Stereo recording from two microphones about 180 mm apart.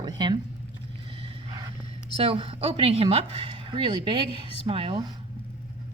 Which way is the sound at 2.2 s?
30° right (ahead or behind).